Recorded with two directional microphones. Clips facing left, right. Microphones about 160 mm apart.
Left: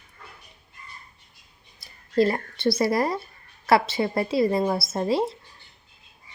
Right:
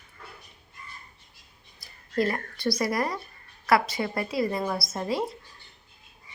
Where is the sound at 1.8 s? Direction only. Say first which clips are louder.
Left 5 dB; 30° left (ahead or behind).